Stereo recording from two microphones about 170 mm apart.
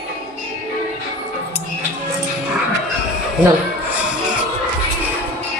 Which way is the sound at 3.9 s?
5° right (ahead or behind).